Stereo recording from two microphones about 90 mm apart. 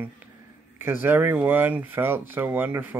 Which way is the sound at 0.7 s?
25° right (ahead or behind).